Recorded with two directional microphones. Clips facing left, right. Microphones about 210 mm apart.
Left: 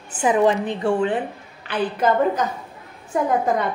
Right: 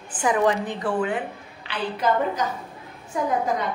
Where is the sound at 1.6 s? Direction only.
50° left (ahead or behind).